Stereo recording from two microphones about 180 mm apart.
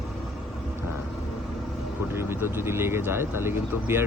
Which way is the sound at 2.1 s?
15° right (ahead or behind).